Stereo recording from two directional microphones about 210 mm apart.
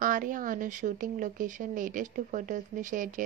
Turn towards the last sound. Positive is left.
turn(degrees=-40)  # may be behind; listen again after turning